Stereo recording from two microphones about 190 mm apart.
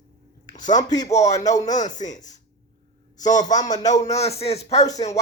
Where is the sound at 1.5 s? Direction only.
40° left (ahead or behind).